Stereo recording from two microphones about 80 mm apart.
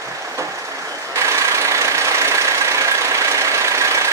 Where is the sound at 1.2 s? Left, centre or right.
Right.